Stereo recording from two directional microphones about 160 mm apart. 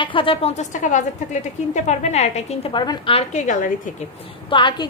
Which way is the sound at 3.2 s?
50° left (ahead or behind).